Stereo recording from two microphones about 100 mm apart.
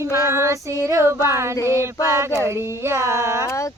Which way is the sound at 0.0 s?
30° right (ahead or behind).